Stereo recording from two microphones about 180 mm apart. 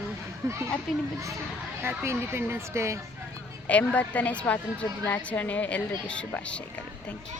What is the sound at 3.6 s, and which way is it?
Speech, 10° left (ahead or behind).